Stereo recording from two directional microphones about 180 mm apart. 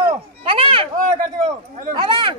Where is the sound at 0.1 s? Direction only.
30° right (ahead or behind).